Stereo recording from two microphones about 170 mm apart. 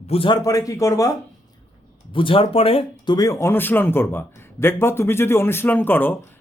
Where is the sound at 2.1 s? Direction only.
30° left (ahead or behind).